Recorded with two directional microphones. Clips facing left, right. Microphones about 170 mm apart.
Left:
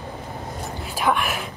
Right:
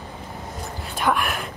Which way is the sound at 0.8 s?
Centre (ahead or behind).